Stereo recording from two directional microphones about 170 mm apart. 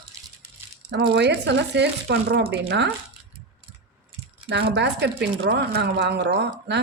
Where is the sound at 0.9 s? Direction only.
90° right.